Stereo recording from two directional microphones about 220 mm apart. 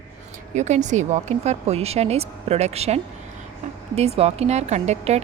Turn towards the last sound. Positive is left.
turn(degrees=-30)  # may be behind; listen again after turning